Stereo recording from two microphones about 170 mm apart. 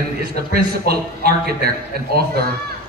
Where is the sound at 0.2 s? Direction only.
70° right (ahead or behind).